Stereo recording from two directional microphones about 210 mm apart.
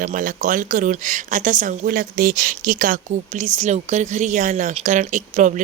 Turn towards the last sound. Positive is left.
turn(degrees=-35)  # may be behind; listen again after turning